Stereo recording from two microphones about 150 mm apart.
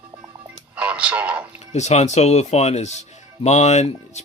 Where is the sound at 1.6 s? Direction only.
50° left (ahead or behind).